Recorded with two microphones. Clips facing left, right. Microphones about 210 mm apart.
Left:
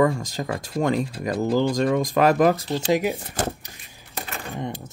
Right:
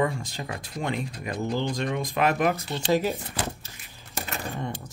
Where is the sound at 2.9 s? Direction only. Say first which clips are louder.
Left 2 dB; 15° left (ahead or behind).